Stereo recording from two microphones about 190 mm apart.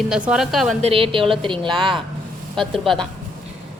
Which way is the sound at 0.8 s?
30° right (ahead or behind).